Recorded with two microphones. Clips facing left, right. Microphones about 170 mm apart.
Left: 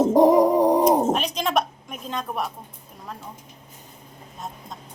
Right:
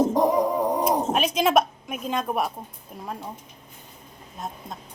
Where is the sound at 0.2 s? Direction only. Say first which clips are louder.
Left 6 dB; 40° left (ahead or behind).